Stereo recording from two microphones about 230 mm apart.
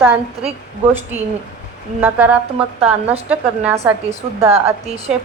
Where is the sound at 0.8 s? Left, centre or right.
Centre.